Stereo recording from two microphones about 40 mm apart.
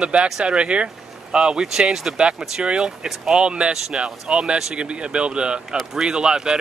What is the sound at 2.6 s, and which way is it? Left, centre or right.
Speech, right.